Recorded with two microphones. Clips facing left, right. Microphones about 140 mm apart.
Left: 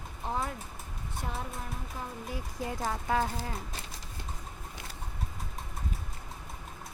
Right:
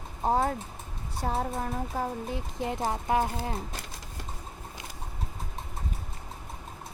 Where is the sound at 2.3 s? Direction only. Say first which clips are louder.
Right 4 dB; 25° right (ahead or behind).